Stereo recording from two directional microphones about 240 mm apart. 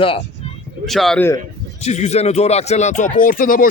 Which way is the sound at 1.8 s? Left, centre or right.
Left.